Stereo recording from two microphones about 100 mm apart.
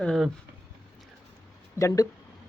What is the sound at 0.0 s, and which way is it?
Speech, centre (ahead or behind).